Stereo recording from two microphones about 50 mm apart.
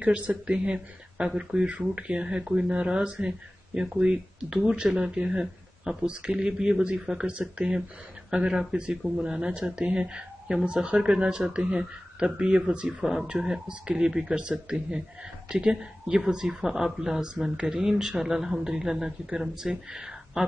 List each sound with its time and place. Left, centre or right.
0.0 s speech: right
0.5 s speech: right